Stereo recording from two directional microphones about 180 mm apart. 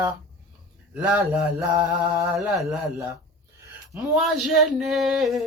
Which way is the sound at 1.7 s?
25° right (ahead or behind).